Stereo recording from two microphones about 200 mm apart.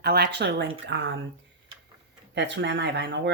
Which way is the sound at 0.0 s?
55° right (ahead or behind).